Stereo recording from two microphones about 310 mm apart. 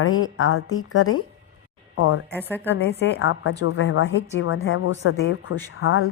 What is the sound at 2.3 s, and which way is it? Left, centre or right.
Speech, centre.